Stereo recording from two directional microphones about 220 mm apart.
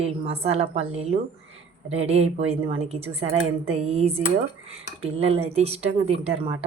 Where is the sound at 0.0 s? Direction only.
30° right (ahead or behind).